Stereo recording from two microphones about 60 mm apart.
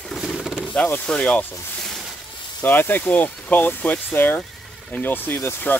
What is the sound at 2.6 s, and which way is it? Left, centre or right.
Speech, left.